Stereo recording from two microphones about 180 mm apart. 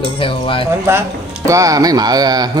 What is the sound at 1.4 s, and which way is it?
Speech, 20° right (ahead or behind).